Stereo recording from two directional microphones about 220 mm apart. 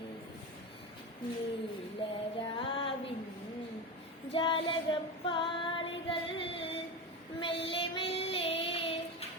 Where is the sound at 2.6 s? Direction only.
25° left (ahead or behind).